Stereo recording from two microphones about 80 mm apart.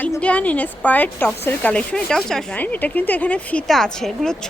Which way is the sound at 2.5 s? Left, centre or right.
Left.